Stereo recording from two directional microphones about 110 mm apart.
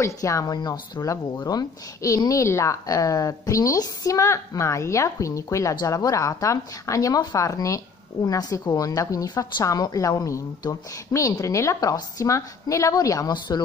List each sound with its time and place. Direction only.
0.0 s a woman's voice: 30° left (ahead or behind)